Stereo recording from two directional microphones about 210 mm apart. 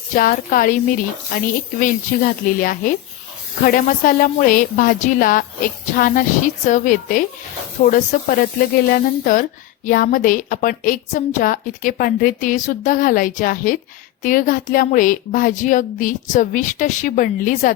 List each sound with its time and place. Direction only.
0.2 s speech: 40° left (ahead or behind)